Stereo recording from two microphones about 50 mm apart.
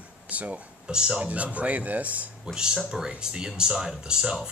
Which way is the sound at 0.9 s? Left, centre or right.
Centre.